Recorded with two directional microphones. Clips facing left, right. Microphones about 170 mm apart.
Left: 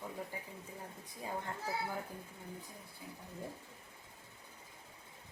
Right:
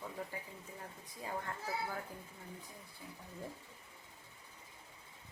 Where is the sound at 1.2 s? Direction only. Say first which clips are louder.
Left 1 dB; 15° left (ahead or behind).